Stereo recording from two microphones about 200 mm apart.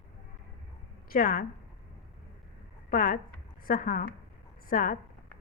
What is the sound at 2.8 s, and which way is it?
A woman's voice, 40° left (ahead or behind).